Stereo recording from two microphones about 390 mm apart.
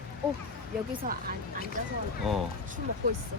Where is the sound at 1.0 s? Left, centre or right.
Right.